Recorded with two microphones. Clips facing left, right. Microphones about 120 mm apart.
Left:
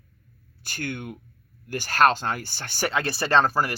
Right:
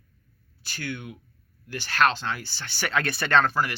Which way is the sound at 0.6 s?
50° left (ahead or behind).